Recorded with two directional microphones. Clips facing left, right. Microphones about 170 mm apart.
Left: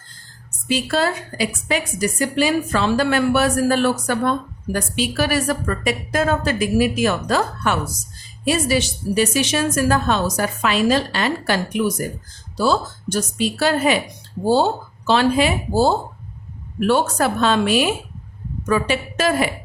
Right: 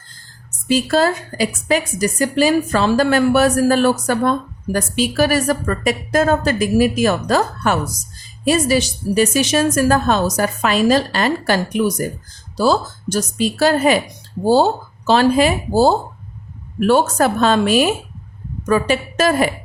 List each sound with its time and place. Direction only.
0.7 s a woman's voice: 40° right (ahead or behind)